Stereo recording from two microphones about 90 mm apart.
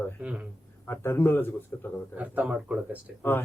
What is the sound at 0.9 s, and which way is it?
Speech, 25° left (ahead or behind).